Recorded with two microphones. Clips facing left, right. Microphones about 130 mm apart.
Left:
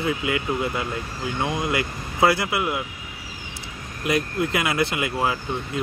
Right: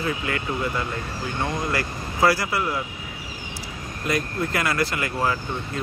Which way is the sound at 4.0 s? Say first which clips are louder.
Left 2 dB; 15° left (ahead or behind).